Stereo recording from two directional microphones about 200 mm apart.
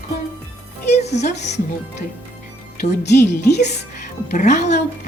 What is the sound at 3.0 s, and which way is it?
Speech, 55° left (ahead or behind).